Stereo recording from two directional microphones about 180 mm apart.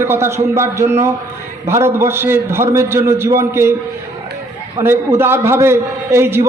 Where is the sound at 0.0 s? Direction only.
15° right (ahead or behind).